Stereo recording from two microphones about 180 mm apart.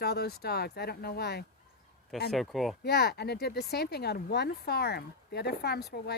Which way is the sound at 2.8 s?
65° left (ahead or behind).